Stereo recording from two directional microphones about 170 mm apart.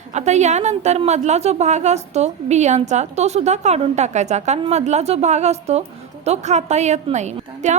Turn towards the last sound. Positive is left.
turn(degrees=-45)  # may be behind; listen again after turning